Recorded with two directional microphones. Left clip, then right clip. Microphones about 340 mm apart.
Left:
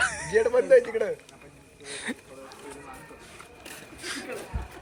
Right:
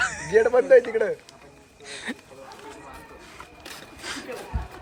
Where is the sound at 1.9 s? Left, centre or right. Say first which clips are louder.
Right 1 dB; centre.